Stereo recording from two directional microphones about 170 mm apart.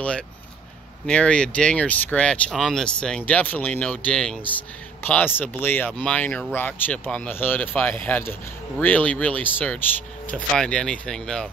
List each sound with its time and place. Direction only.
1.0 s speech: 5° left (ahead or behind)